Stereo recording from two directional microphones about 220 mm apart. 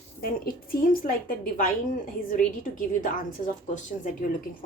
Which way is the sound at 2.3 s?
40° left (ahead or behind).